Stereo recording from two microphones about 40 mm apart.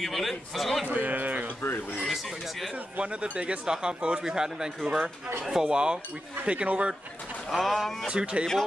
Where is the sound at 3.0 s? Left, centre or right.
Right.